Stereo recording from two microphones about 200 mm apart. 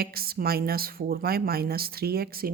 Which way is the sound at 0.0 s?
50° right (ahead or behind).